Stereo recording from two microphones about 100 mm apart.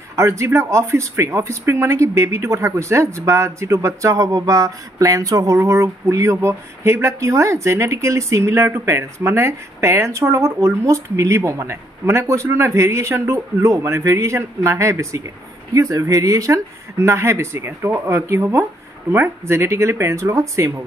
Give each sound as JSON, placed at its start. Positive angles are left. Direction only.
{"t": 0.1, "sound": "speech", "side_deg": -30}